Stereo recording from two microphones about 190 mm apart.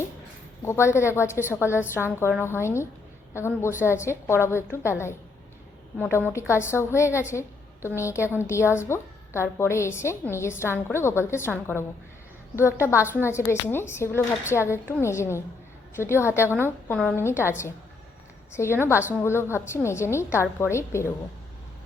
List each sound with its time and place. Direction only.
0.6 s a woman's voice: 15° left (ahead or behind)
13.0 s a woman's voice: 10° right (ahead or behind)
13.2 s a woman's voice: 15° left (ahead or behind)
18.6 s a woman's voice: 15° left (ahead or behind)